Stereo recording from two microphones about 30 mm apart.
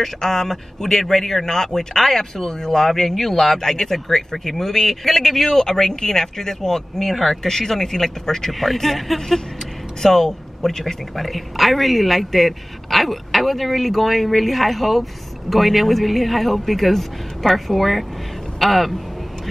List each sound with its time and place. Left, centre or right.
0.0 s speech: centre
2.7 s a man's voice: centre
7.1 s a man's voice: centre
7.4 s speech: centre
8.5 s a man's voice: centre
9.2 s speech: centre
11.1 s a man's voice: centre